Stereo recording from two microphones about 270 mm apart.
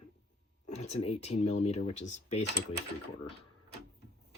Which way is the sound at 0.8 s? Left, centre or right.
Left.